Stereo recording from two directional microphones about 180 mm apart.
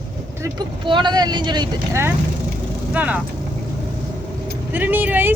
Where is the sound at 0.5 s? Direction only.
25° right (ahead or behind); by 3.2 s 10° right (ahead or behind).